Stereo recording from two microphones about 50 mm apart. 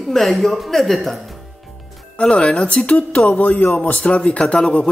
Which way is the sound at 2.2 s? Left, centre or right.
Left.